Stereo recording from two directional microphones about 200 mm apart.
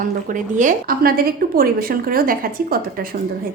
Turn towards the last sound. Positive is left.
turn(degrees=-45)  # may be behind; listen again after turning